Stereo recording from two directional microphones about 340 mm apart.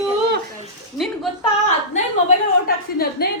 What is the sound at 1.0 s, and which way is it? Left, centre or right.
Speech, centre.